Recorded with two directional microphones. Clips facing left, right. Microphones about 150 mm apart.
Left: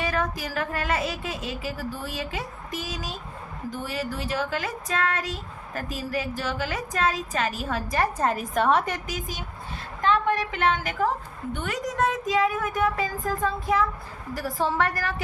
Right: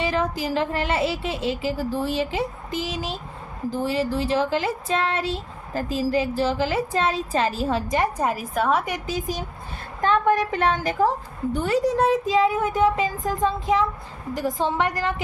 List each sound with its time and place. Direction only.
0.0 s speech: 25° right (ahead or behind); by 9.0 s 5° right (ahead or behind)
9.0 s a woman's voice: 35° right (ahead or behind); by 15.1 s 20° right (ahead or behind)